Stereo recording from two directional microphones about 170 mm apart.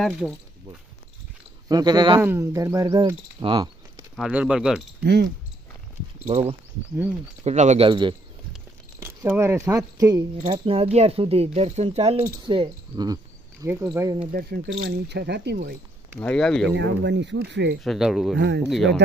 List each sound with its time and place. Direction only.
1.7 s speech: 25° right (ahead or behind)
4.2 s speech: 5° right (ahead or behind)
5.0 s speech: 75° right (ahead or behind)
6.2 s speech: 40° right (ahead or behind)
7.9 s speech: 30° right (ahead or behind)
9.0 s speech: 15° right (ahead or behind)
10.3 s speech: 35° right (ahead or behind)
12.4 s speech: 25° right (ahead or behind)
14.3 s speech: 65° right (ahead or behind)
16.2 s speech: 5° left (ahead or behind)
16.7 s speech: 90° right
17.8 s speech: centre (ahead or behind)
18.3 s speech: 80° right
18.7 s speech: centre (ahead or behind)